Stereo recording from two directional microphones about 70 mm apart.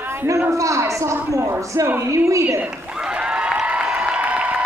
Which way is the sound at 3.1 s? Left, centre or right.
Centre.